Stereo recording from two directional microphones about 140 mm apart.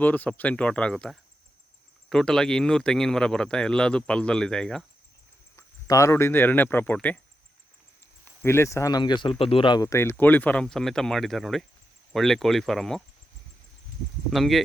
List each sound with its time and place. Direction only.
0.0 s speech: 10° left (ahead or behind)
5.5 s speech: 20° left (ahead or behind)
8.4 s speech: 20° left (ahead or behind); by 13.0 s centre (ahead or behind)
14.3 s speech: centre (ahead or behind)